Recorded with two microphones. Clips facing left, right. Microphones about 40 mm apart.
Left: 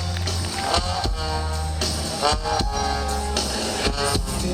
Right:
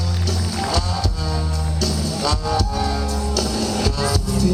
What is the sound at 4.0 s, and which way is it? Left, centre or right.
Music, left.